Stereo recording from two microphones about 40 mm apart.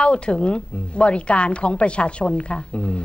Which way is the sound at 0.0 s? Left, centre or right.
Left.